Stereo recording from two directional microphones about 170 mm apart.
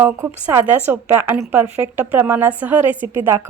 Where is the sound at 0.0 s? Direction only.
15° right (ahead or behind).